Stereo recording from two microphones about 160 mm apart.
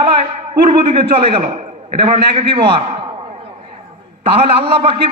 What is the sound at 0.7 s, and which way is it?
A man's voice, 35° right (ahead or behind).